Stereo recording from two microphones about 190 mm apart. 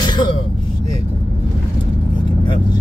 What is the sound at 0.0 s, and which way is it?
Vehicle, 25° left (ahead or behind).